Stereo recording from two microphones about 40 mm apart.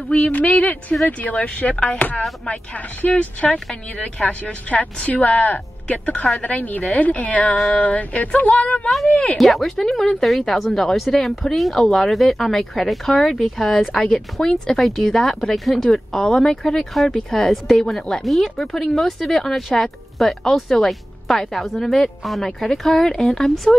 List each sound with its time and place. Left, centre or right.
0.1 s speech: left
4.0 s a woman's voice: left
9.4 s a woman's voice: centre
14.8 s a woman's voice: centre